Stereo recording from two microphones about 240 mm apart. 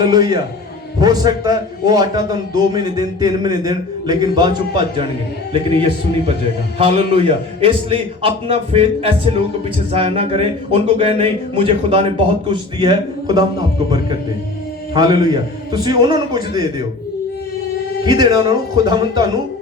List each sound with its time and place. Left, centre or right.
0.0 s a man's voice: centre
6.7 s a man's voice: right
14.9 s a man's voice: centre
18.0 s a man's voice: centre